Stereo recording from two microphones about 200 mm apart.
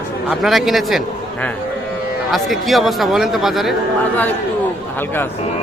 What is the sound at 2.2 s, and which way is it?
A man's voice, centre (ahead or behind).